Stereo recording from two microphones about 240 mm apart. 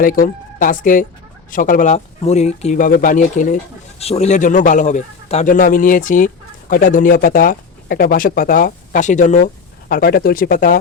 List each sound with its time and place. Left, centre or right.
0.0 s speech: left